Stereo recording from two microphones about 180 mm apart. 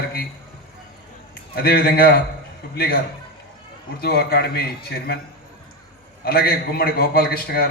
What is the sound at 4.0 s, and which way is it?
A man's voice, 60° left (ahead or behind).